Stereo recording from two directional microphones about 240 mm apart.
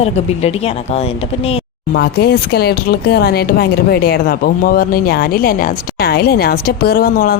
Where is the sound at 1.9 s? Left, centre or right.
Left.